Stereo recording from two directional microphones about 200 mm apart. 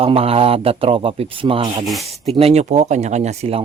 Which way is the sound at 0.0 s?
30° right (ahead or behind).